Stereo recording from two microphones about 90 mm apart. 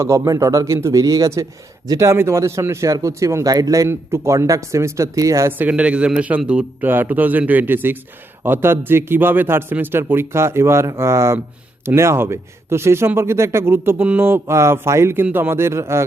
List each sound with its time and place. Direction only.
0.0 s a man's voice: 35° right (ahead or behind)
3.8 s a man's voice: 30° right (ahead or behind)
5.5 s a man's voice: 20° right (ahead or behind)